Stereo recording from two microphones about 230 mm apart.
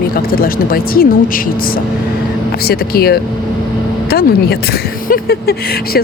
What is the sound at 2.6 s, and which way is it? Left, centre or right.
A woman's voice, left.